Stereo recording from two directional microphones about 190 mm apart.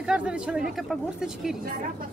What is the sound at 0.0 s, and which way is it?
Speech, 5° right (ahead or behind).